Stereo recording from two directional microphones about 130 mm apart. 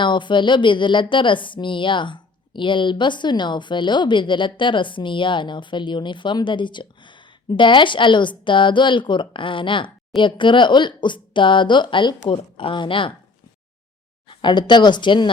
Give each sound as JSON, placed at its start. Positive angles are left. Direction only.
{"t": 0.0, "sound": "a woman's voice", "side_deg": 35}
{"t": 14.3, "sound": "a woman's voice", "side_deg": 35}